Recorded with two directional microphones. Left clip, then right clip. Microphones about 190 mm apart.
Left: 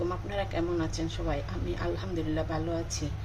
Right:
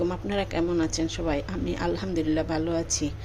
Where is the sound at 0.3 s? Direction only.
50° right (ahead or behind).